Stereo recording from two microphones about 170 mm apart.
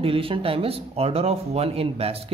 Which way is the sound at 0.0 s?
35° right (ahead or behind).